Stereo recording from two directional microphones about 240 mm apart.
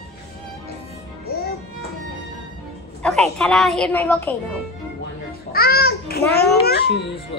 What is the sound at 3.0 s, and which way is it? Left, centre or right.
A woman's voice, centre.